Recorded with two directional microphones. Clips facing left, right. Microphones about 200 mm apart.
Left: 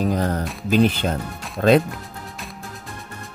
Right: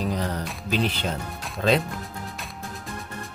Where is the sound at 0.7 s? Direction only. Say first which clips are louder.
Left 8 dB; 50° left (ahead or behind).